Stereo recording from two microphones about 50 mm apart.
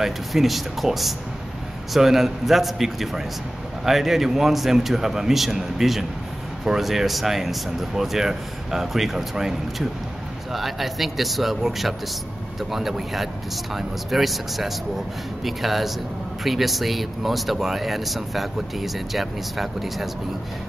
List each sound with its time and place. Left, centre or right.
0.0 s speech: centre